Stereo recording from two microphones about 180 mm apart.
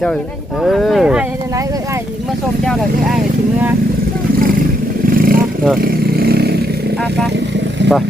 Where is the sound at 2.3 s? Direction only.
Centre (ahead or behind).